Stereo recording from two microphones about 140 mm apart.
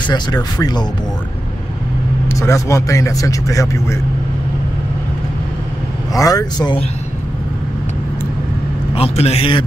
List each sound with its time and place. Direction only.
0.0 s speech: 30° left (ahead or behind)
2.3 s speech: 20° left (ahead or behind)
6.1 s speech: 25° left (ahead or behind)
8.9 s a man's voice: 45° left (ahead or behind)